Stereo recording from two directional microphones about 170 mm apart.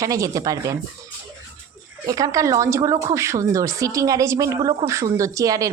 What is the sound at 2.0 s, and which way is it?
Speech, 20° right (ahead or behind).